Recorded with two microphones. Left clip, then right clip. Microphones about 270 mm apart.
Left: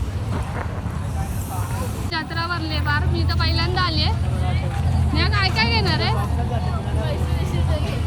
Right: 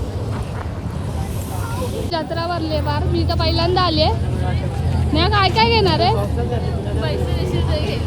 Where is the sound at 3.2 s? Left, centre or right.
Right.